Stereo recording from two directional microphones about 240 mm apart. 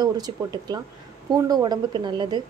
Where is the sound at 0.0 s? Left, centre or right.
Centre.